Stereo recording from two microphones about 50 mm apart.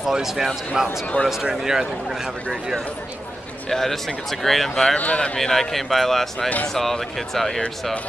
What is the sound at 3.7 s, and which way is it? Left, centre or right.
Speech, centre.